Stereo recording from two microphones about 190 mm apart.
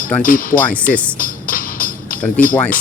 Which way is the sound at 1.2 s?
45° left (ahead or behind).